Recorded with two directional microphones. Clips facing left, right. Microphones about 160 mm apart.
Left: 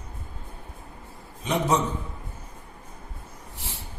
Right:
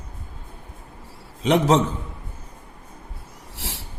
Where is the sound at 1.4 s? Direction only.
90° right.